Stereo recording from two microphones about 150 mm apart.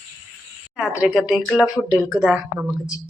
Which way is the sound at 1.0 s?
Centre (ahead or behind).